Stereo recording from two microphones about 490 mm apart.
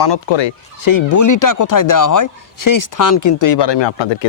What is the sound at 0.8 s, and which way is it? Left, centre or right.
Speech, left.